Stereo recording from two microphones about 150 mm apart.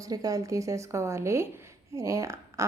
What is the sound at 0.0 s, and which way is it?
A woman's voice, 25° right (ahead or behind).